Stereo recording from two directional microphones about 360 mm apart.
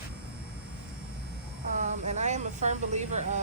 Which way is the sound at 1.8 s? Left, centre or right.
Centre.